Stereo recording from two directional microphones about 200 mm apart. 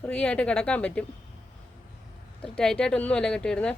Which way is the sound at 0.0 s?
5° left (ahead or behind).